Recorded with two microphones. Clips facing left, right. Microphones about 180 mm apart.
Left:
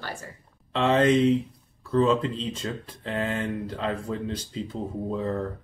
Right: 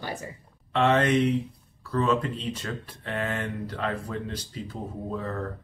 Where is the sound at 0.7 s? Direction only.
25° left (ahead or behind).